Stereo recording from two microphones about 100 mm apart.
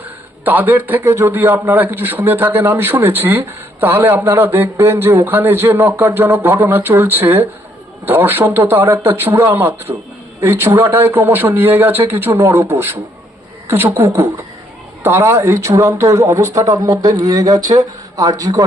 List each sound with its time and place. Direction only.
0.0 s a man's voice: 15° right (ahead or behind); by 18.6 s 35° right (ahead or behind)